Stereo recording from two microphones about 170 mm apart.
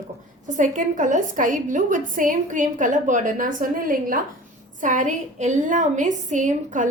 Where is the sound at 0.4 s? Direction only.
50° right (ahead or behind).